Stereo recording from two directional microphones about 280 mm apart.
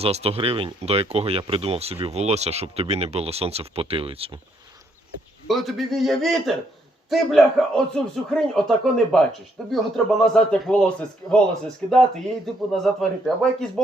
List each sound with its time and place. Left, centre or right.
0.0 s speech: right
5.5 s speech: centre
12.7 s speech: centre